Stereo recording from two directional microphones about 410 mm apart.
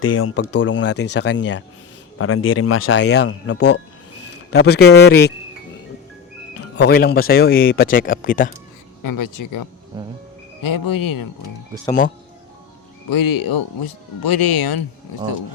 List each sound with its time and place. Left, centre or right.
0.0 s speech: left
6.6 s music: left
6.9 s speech: left
9.0 s speech: left
11.9 s speech: centre
13.1 s speech: left